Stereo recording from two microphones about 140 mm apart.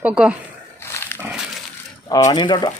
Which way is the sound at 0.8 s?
15° left (ahead or behind).